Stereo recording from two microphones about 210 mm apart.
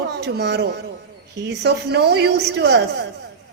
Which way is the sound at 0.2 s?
50° right (ahead or behind).